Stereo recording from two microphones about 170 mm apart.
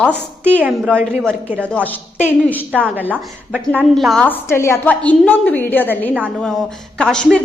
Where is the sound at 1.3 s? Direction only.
10° right (ahead or behind).